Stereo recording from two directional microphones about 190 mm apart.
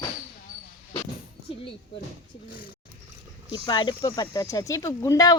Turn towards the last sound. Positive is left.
turn(degrees=20)  # may be behind; listen again after turning